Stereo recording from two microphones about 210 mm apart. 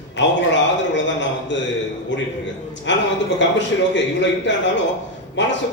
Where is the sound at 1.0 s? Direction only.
60° left (ahead or behind).